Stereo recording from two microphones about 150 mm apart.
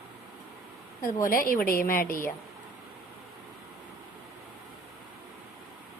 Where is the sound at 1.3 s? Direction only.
70° left (ahead or behind).